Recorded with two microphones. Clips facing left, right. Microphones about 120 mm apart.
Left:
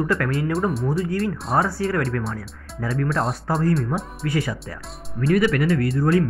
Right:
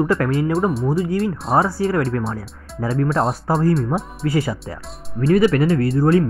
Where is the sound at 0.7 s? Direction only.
Centre (ahead or behind).